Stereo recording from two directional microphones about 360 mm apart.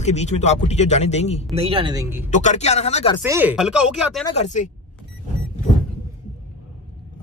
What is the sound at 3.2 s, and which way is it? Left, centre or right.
Speech, centre.